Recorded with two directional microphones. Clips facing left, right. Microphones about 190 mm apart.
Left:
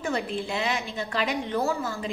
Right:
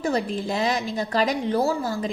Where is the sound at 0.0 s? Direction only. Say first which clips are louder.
Right 4 dB; 40° right (ahead or behind).